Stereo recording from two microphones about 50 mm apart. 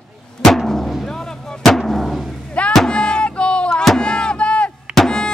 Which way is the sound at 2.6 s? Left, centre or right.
Left.